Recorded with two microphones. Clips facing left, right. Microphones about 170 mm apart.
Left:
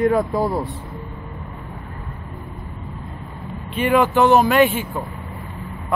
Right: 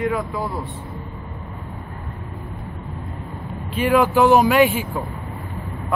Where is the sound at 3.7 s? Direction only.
Centre (ahead or behind).